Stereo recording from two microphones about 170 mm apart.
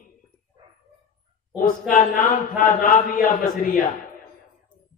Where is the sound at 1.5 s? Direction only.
50° left (ahead or behind).